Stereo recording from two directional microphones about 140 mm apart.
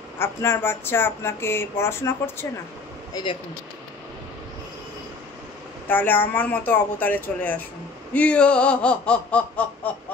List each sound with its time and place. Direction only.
0.2 s speech: 15° left (ahead or behind)
5.9 s speech: 15° left (ahead or behind)